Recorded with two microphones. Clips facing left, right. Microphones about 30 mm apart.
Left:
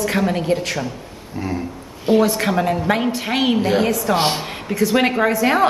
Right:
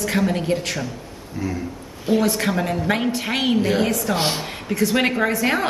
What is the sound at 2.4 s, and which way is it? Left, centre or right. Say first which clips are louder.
A woman's voice: left 3 dB; centre.